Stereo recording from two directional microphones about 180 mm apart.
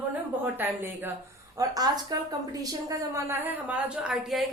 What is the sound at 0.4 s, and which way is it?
A woman's voice, 10° right (ahead or behind).